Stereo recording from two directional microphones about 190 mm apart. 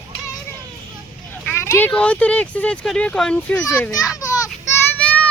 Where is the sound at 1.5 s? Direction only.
15° left (ahead or behind).